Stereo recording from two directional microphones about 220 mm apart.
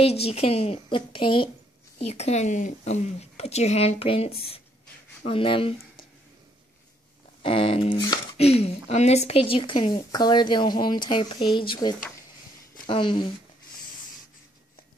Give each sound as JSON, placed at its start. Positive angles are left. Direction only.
{"t": 0.0, "sound": "speech", "side_deg": 25}
{"t": 7.4, "sound": "speech", "side_deg": 25}